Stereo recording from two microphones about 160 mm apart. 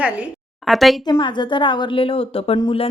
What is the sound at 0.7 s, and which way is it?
Speech, centre (ahead or behind).